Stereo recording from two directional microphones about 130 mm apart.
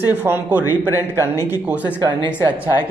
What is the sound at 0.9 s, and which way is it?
Speech, 25° left (ahead or behind).